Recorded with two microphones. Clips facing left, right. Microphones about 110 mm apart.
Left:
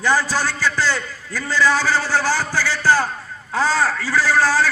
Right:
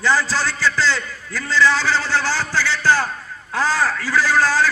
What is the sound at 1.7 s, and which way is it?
A man's voice, 45° left (ahead or behind).